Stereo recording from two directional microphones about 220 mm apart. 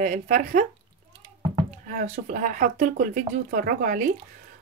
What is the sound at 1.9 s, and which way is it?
Speech, 35° right (ahead or behind).